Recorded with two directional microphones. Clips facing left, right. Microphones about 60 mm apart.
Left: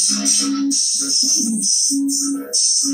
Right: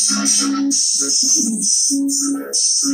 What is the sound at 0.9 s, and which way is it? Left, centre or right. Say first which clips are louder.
Music: right 2 dB; centre.